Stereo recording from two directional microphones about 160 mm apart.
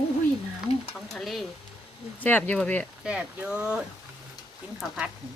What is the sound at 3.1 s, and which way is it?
Speech, 5° right (ahead or behind).